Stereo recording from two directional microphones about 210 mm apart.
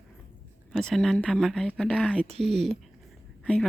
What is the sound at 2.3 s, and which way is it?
Speech, 30° right (ahead or behind).